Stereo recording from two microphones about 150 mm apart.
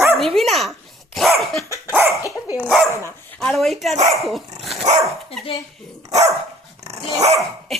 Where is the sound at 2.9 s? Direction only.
20° left (ahead or behind).